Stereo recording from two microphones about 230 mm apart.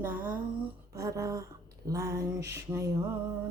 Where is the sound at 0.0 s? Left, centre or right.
Centre.